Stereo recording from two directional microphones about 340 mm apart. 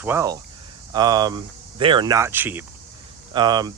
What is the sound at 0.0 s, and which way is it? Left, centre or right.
Speech, centre.